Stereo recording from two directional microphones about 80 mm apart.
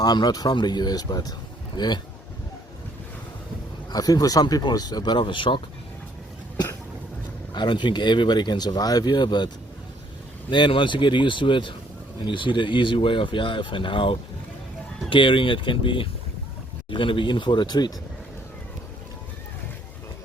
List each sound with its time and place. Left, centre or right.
0.0 s speech: left
3.9 s a man's voice: left
7.5 s speech: left
10.5 s speech: left
15.1 s speech: left